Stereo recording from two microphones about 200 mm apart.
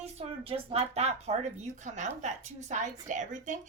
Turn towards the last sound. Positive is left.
turn(degrees=-40)  # may be behind; listen again after turning